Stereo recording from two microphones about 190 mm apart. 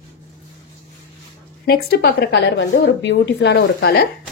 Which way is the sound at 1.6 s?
55° left (ahead or behind).